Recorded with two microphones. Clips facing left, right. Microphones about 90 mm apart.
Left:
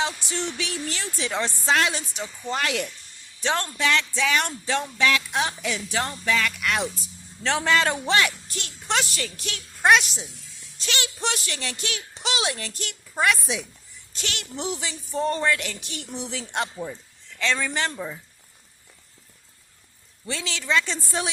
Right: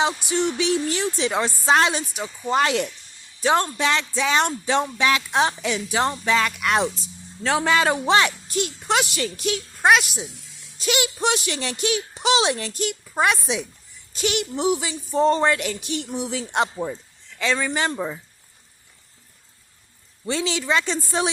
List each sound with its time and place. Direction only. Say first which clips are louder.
0.0 s speech: right 6 dB; 20° right (ahead or behind)
2.0 s speech: right 4 dB; 10° right (ahead or behind)
2.6 s speech: right 7 dB; 30° right (ahead or behind)
3.4 s speech: right 5 dB; 15° right (ahead or behind)
5.7 s speech: right 5 dB; 20° right (ahead or behind)
7.4 s speech: right 3 dB; 10° right (ahead or behind)
9.8 s speech: right 1 dB; 5° right (ahead or behind)
10.8 s speech: right 7 dB; 15° right (ahead or behind)
15.1 s speech: right 5 dB; 25° right (ahead or behind); by 17.7 s 5° right (ahead or behind)
17.9 s speech: right 5 dB; 45° right (ahead or behind)
20.2 s speech: right 6 dB; 20° right (ahead or behind)